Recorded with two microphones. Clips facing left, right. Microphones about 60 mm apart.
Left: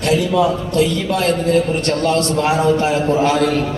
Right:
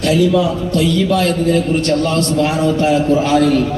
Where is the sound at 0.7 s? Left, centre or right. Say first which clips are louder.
Right 2 dB; left.